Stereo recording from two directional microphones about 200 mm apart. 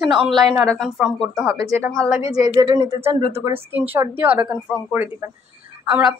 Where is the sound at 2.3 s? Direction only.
20° right (ahead or behind).